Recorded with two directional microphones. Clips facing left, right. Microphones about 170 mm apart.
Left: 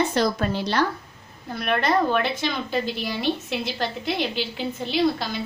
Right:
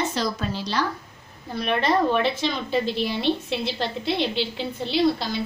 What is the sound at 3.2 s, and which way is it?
A woman's voice, 10° left (ahead or behind).